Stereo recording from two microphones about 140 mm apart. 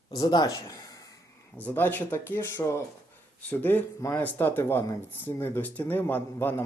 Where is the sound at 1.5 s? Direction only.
10° left (ahead or behind).